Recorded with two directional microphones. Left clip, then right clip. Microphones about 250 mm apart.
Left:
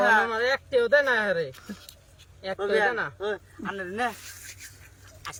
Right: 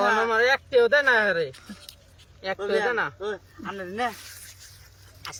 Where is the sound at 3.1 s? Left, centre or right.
Centre.